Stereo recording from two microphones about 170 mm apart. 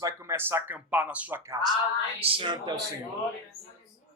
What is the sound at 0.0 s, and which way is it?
Speech, 15° right (ahead or behind).